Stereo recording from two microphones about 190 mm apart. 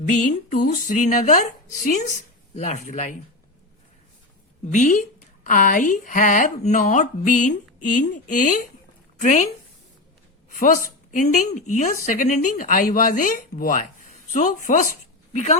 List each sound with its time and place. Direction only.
0.1 s a woman's voice: 45° left (ahead or behind)
4.6 s a woman's voice: 40° left (ahead or behind)
10.6 s a woman's voice: 45° left (ahead or behind)